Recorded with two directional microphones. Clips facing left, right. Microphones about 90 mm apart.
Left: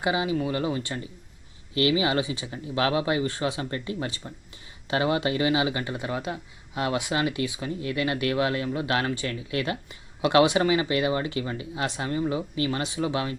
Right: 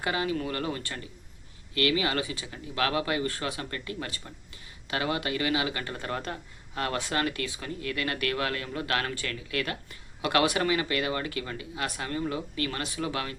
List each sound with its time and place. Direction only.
0.0 s speech: 15° left (ahead or behind)